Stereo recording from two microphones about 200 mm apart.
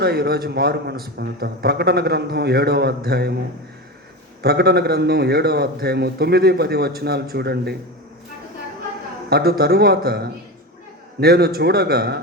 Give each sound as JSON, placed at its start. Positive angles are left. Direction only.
{"t": 0.0, "sound": "a man's voice", "side_deg": -50}
{"t": 4.4, "sound": "a man's voice", "side_deg": -50}
{"t": 9.3, "sound": "a man's voice", "side_deg": -50}